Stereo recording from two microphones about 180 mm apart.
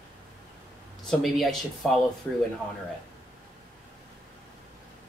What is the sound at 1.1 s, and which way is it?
Speech, centre (ahead or behind).